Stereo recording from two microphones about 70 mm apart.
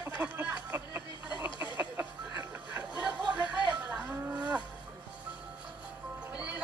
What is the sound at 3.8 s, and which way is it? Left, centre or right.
Moo, right.